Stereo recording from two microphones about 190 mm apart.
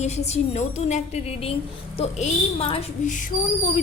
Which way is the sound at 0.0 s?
35° left (ahead or behind).